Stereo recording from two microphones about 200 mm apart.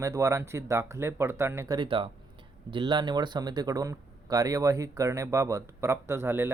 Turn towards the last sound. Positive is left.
turn(degrees=-10)  # may be behind; listen again after turning